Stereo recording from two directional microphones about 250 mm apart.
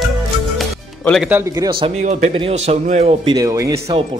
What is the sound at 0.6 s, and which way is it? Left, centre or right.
Speech, centre.